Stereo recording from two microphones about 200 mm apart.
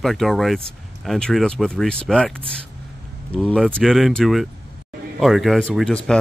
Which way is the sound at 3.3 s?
5° left (ahead or behind).